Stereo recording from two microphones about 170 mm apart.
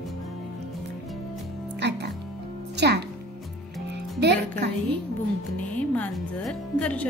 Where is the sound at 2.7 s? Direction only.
80° right.